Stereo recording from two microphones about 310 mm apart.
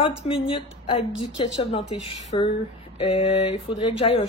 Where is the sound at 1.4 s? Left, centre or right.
Centre.